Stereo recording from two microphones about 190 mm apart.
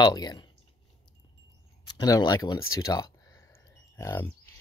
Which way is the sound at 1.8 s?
20° left (ahead or behind).